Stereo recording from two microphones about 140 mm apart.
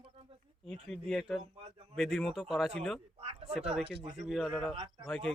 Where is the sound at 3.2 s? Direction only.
45° right (ahead or behind).